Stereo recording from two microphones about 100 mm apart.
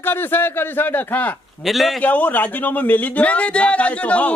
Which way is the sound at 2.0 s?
15° left (ahead or behind).